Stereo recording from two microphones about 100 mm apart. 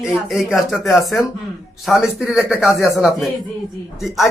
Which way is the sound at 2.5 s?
25° left (ahead or behind).